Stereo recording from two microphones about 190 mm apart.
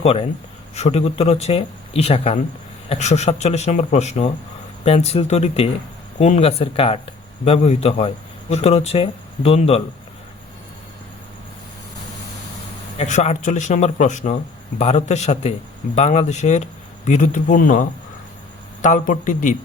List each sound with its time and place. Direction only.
0.0 s speech: 30° left (ahead or behind)
13.0 s a man's voice: 40° left (ahead or behind)